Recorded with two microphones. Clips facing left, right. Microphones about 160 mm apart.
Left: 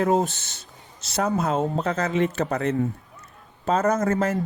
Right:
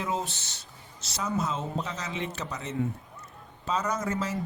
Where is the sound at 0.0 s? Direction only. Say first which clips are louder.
Left 10 dB; 50° left (ahead or behind).